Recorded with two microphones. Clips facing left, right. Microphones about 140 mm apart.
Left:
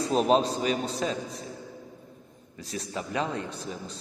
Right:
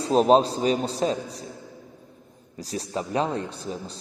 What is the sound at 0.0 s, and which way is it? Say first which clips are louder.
A man's voice: right 5 dB; 35° right (ahead or behind).